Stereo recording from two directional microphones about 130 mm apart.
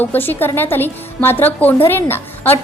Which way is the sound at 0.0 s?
15° left (ahead or behind).